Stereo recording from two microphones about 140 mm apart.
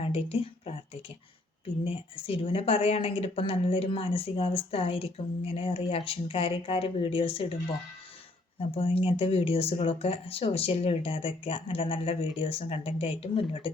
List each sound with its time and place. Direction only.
0.0 s speech: 45° left (ahead or behind)
1.8 s a woman's voice: 40° left (ahead or behind)
8.7 s a woman's voice: 40° left (ahead or behind)